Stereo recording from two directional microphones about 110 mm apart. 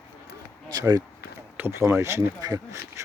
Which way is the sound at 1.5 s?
20° right (ahead or behind).